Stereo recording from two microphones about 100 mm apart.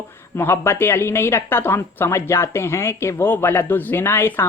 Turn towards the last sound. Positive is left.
turn(degrees=25)  # may be behind; listen again after turning